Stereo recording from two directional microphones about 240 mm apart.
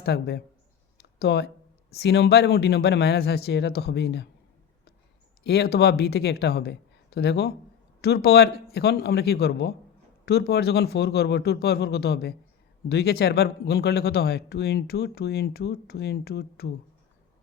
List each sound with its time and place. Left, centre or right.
0.0 s speech: left
5.4 s speech: left